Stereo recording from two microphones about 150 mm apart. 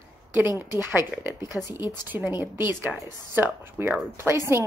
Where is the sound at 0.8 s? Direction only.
15° right (ahead or behind).